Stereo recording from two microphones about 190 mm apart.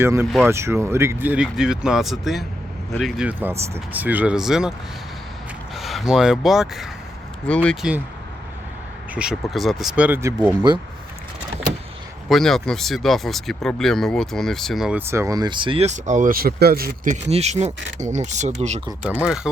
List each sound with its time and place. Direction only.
0.0 s speech: 15° right (ahead or behind)
5.7 s speech: centre (ahead or behind)
9.1 s speech: 5° right (ahead or behind); by 10.8 s 20° right (ahead or behind)
12.3 s speech: centre (ahead or behind); by 17.7 s 35° right (ahead or behind)
17.7 s speech: 75° right (ahead or behind)
18.0 s speech: 40° right (ahead or behind)
19.2 s speech: 5° right (ahead or behind)